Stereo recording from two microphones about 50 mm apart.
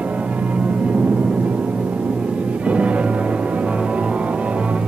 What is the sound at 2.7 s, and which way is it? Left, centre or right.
Music, right.